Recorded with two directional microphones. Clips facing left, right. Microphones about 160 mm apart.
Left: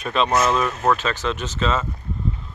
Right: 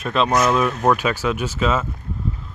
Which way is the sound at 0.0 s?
Centre (ahead or behind).